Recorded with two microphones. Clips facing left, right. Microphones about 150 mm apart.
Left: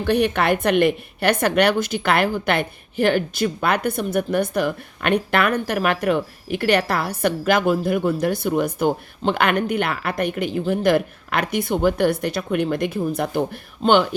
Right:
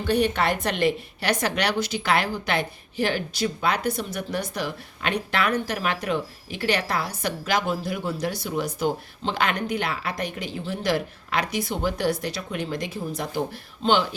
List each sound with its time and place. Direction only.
0.1 s a woman's voice: 60° left (ahead or behind)